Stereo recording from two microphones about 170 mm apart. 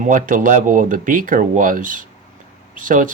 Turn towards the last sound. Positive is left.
turn(degrees=-50)  # may be behind; listen again after turning